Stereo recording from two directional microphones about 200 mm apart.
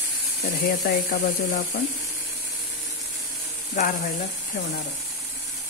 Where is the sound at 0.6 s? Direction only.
40° left (ahead or behind).